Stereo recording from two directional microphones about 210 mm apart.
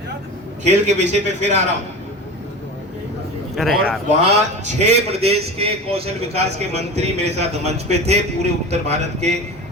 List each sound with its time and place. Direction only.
0.6 s a man's voice: 35° right (ahead or behind)
3.5 s a man's voice: centre (ahead or behind)
4.6 s a man's voice: 30° right (ahead or behind)